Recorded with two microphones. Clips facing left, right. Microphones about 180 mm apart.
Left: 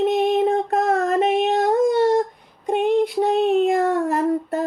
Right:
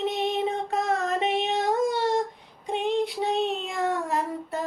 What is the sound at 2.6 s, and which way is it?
Child singing, 50° left (ahead or behind).